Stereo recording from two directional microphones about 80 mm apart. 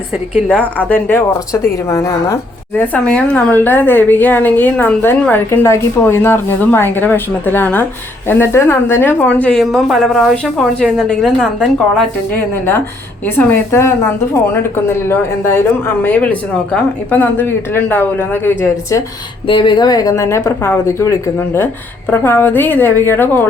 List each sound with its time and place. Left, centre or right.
0.8 s a woman's voice: left
1.9 s a woman's voice: left
2.7 s a woman's voice: left
3.5 s a woman's voice: left
5.3 s a woman's voice: left; by 9.6 s centre
9.6 s a woman's voice: centre
12.3 s a woman's voice: left
19.5 s speech: left
19.9 s a woman's voice: left
20.2 s a woman's voice: left
21.3 s a woman's voice: left